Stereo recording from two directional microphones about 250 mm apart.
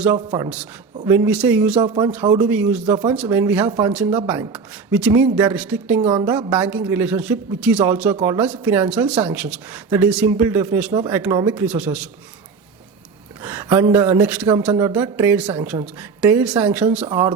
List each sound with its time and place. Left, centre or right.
0.3 s speech: centre
0.5 s a man's voice: centre
6.0 s a woman's voice: centre
6.2 s a man's voice: centre
13.4 s speech: centre